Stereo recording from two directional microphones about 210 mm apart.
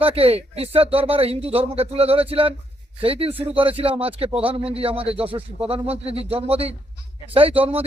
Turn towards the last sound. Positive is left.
turn(degrees=-25)  # may be behind; listen again after turning